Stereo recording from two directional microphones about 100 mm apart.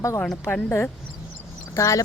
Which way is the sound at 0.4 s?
25° left (ahead or behind).